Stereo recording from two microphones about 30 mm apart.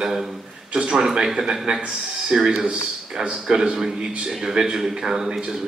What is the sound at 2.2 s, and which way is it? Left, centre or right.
Speech, right.